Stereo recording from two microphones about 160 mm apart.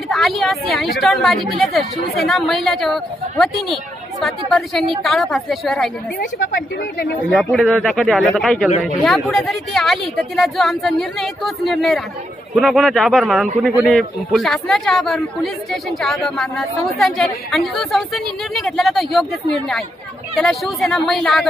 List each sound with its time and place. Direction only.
0.1 s a man's voice: centre (ahead or behind)
6.1 s a woman's voice: 90° left
7.3 s a man's voice: centre (ahead or behind)